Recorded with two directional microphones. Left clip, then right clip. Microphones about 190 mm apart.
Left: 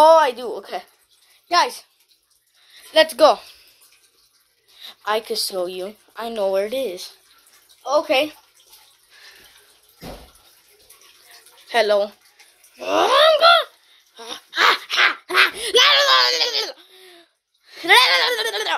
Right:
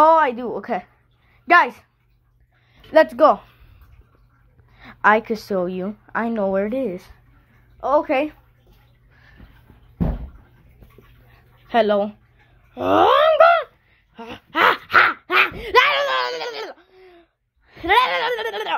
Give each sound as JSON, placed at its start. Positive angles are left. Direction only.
{"t": 0.0, "sound": "a woman's voice", "side_deg": 0}
{"t": 3.3, "sound": "speech", "side_deg": 20}
{"t": 4.7, "sound": "speech", "side_deg": 0}
{"t": 11.6, "sound": "speech", "side_deg": -5}
{"t": 13.2, "sound": "a sound", "side_deg": 5}